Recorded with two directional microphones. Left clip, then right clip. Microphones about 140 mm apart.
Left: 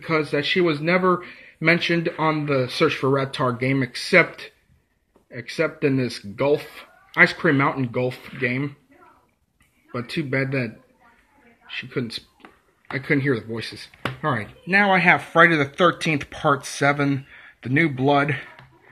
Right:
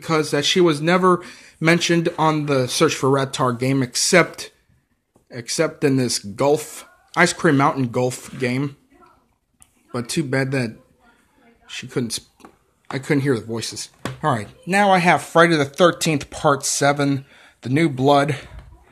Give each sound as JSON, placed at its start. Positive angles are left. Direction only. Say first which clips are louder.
{"t": 0.0, "sound": "speech", "louder": "right 3 dB", "side_deg": -30}
{"t": 9.9, "sound": "speech", "louder": "right 3 dB", "side_deg": -35}